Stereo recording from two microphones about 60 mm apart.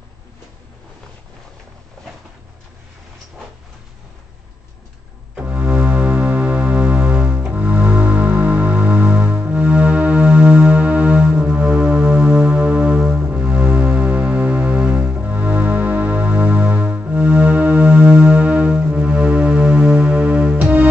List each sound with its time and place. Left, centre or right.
5.3 s keyboard: right